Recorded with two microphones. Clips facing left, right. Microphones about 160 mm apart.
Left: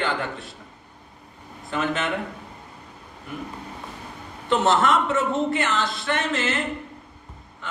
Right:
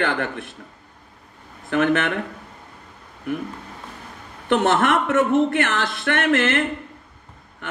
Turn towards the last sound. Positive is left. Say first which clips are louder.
# right 5 dB
turn(degrees=-60)  # may be behind; listen again after turning